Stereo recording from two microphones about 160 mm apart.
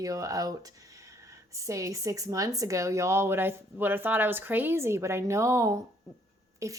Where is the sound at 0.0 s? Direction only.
20° right (ahead or behind).